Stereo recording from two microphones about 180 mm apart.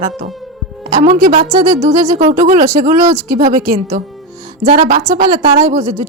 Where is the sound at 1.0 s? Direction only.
45° right (ahead or behind).